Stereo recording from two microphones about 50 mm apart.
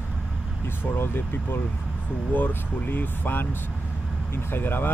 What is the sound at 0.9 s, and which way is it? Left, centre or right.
Speech, left.